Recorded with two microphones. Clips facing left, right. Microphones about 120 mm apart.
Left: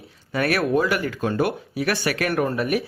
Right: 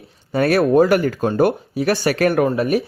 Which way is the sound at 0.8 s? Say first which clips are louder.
Right 8 dB; 60° right (ahead or behind).